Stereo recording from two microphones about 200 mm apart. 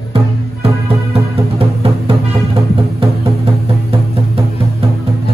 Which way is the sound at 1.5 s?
30° right (ahead or behind).